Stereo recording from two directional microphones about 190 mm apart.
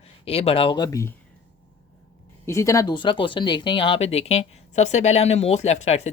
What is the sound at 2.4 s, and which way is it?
Speech, 15° left (ahead or behind).